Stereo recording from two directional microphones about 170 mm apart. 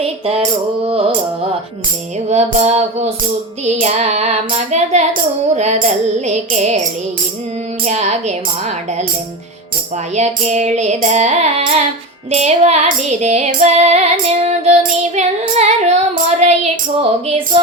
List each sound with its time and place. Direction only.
0.0 s music: 35° right (ahead or behind)
2.3 s music: 40° right (ahead or behind)
7.9 s a woman's voice: 40° right (ahead or behind)
10.2 s music: 40° right (ahead or behind)
12.3 s child singing: 40° right (ahead or behind)
17.0 s music: 30° right (ahead or behind)